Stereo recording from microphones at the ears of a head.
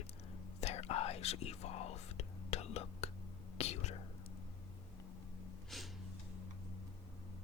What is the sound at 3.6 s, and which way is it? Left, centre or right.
Whispering, left.